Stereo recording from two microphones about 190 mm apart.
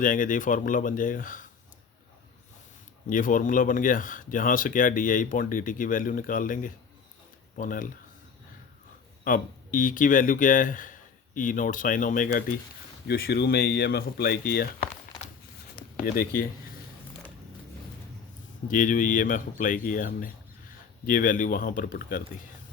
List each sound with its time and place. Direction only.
0.0 s speech: 45° left (ahead or behind)
3.1 s speech: 45° left (ahead or behind)
9.2 s speech: 45° left (ahead or behind)
13.1 s speech: 55° left (ahead or behind)
16.0 s speech: 50° left (ahead or behind)
18.7 s speech: 45° left (ahead or behind)